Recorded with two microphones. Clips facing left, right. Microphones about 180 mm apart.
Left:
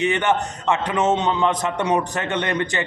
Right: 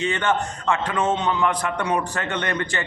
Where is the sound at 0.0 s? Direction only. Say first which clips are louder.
Left 3 dB; 20° left (ahead or behind).